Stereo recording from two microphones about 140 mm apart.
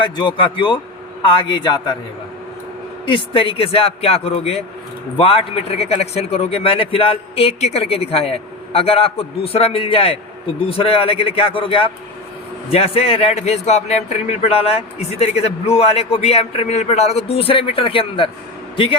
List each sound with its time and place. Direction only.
0.0 s a man's voice: 35° left (ahead or behind)
3.1 s a man's voice: 40° left (ahead or behind)